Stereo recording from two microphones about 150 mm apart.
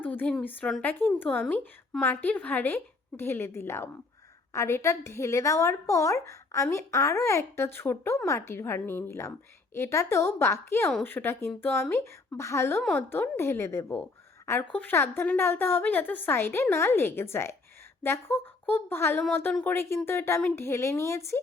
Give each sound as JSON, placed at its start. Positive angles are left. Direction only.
{"t": 0.0, "sound": "a woman's voice", "side_deg": 10}